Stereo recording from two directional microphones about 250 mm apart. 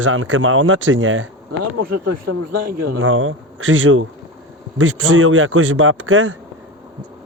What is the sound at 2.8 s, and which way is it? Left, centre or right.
Speech, right.